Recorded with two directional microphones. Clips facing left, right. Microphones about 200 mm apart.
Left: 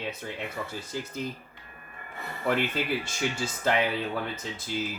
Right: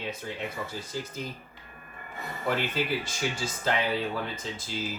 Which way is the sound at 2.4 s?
55° left (ahead or behind).